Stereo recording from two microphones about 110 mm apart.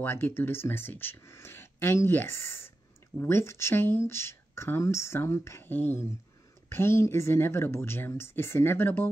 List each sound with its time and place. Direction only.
0.0 s speech: 20° left (ahead or behind)